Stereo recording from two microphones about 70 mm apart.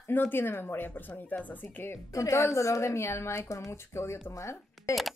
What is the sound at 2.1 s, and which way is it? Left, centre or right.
A woman's voice, left.